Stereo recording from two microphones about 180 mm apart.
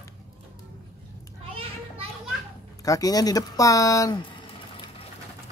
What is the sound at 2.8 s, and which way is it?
Speech, 20° left (ahead or behind).